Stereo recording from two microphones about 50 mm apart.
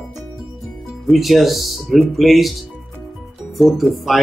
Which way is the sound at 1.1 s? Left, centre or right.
Centre.